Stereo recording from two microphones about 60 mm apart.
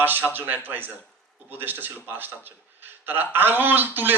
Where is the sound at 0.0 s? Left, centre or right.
Right.